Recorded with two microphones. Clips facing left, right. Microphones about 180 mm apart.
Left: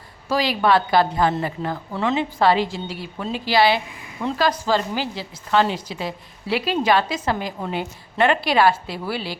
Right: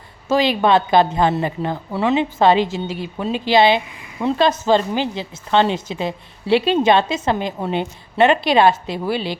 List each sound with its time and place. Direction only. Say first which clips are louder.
0.3 s a woman's voice: right 3 dB; 25° right (ahead or behind)